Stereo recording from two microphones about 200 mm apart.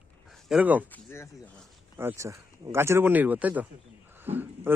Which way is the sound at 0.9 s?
10° left (ahead or behind).